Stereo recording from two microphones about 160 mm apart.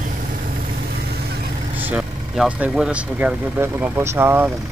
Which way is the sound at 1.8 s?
10° right (ahead or behind).